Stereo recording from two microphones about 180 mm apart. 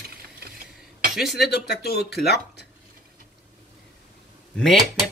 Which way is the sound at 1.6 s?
65° left (ahead or behind).